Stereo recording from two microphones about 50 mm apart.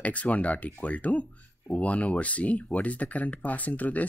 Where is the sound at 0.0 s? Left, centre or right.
Left.